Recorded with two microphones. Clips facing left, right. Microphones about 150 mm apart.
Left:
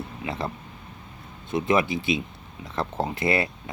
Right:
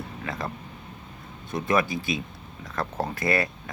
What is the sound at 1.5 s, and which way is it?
Speech, 25° left (ahead or behind).